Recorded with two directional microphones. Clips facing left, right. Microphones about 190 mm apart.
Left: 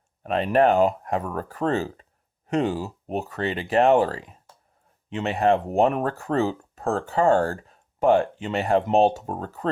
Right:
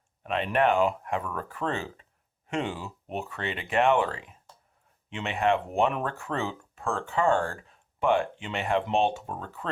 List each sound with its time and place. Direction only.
0.2 s speech: 40° left (ahead or behind)